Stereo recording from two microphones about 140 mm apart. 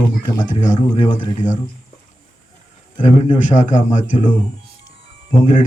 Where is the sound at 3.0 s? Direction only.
60° left (ahead or behind).